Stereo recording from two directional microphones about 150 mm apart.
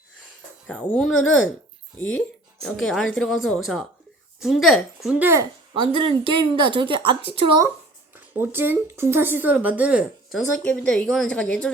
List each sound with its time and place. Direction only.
0.7 s speech: 5° left (ahead or behind)
2.6 s speech: 5° left (ahead or behind)
5.2 s a woman's voice: 20° right (ahead or behind)
5.7 s a woman's voice: 35° right (ahead or behind)
8.1 s speech: 15° right (ahead or behind)
10.6 s speech: 5° left (ahead or behind)